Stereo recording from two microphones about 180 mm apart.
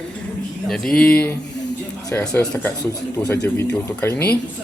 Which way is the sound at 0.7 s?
5° left (ahead or behind).